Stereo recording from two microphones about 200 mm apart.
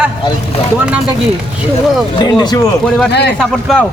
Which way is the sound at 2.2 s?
20° left (ahead or behind).